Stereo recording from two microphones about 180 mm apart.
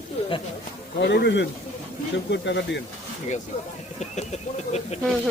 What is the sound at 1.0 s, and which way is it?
Speech, 70° left (ahead or behind).